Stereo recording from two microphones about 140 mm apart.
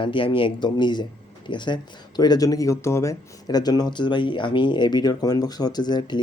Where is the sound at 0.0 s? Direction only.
40° left (ahead or behind).